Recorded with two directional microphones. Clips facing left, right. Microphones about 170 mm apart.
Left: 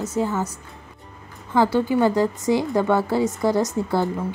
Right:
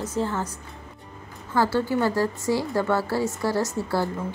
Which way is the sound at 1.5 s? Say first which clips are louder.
Left 4 dB; 20° left (ahead or behind).